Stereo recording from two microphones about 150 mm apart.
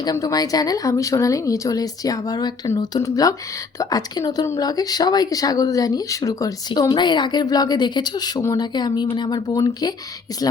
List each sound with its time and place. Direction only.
0.0 s speech: 25° left (ahead or behind)